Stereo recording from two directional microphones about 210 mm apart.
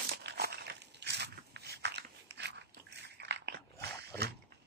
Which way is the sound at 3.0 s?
55° right (ahead or behind).